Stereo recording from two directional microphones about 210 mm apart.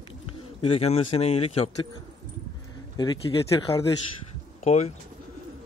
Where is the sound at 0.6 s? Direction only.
30° left (ahead or behind).